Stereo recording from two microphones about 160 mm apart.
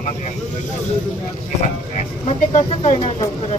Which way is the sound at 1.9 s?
45° left (ahead or behind).